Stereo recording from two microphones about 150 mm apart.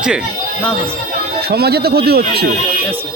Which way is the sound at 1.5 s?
90° right.